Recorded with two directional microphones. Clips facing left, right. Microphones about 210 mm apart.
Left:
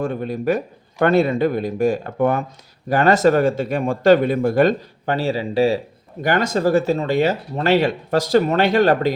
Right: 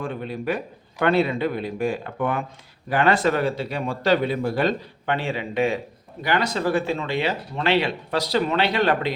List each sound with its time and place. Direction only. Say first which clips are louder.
0.0 s speech: left 6 dB; 45° left (ahead or behind)
6.2 s speech: left 5 dB; 45° left (ahead or behind)